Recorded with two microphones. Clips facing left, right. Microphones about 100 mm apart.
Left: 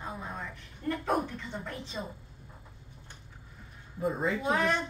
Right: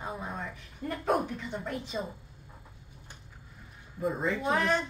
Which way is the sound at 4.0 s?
Centre (ahead or behind).